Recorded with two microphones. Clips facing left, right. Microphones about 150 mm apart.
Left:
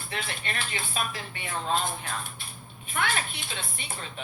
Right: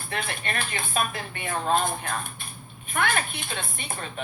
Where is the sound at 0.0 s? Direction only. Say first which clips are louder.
Right 3 dB; 50° right (ahead or behind).